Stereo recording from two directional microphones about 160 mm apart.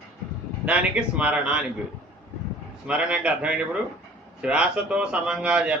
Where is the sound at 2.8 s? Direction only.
5° right (ahead or behind).